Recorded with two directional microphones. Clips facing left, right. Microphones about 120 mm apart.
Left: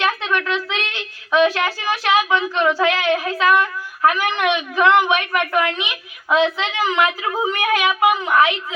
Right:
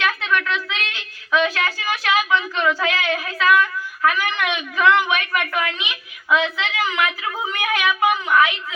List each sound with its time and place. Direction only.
0.0 s a woman's voice: 30° left (ahead or behind)
1.5 s female singing: 25° left (ahead or behind)